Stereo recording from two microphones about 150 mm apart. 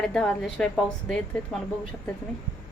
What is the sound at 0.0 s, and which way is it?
A woman's voice, 5° left (ahead or behind).